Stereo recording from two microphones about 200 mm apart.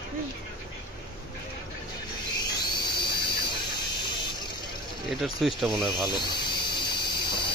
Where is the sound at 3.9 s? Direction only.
20° left (ahead or behind).